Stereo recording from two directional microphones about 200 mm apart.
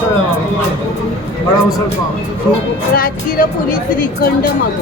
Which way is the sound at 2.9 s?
45° left (ahead or behind).